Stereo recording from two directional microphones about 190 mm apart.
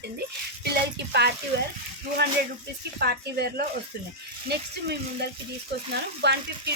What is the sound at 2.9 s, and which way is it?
Frying, 55° right (ahead or behind).